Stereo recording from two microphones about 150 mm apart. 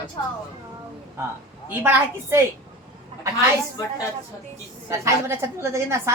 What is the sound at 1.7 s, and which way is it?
Speech, 15° right (ahead or behind).